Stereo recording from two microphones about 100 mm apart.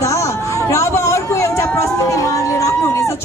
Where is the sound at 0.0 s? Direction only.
30° left (ahead or behind).